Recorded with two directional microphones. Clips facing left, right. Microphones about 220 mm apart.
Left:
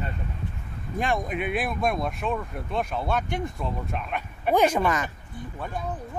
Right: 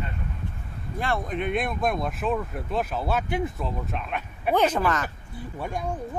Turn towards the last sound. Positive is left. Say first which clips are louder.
# right 2 dB
turn(degrees=-10)  # may be behind; listen again after turning